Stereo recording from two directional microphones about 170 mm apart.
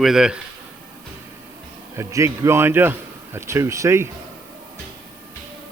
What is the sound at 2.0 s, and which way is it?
Speech, 15° right (ahead or behind).